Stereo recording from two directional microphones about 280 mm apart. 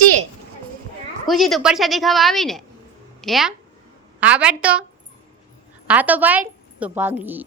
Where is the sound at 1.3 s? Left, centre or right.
Centre.